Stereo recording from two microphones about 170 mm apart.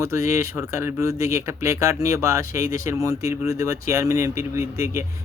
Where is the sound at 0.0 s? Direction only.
15° right (ahead or behind).